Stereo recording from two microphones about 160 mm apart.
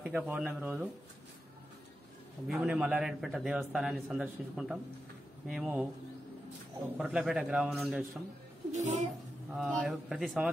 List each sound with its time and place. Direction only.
0.0 s speech: 10° right (ahead or behind)
2.4 s a man's voice: 5° right (ahead or behind)
7.0 s a man's voice: 5° right (ahead or behind)
8.7 s speech: 50° right (ahead or behind)
9.5 s a man's voice: centre (ahead or behind)